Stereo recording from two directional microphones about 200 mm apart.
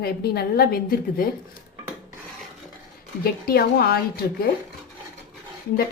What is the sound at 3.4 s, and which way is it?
Speech, 50° left (ahead or behind).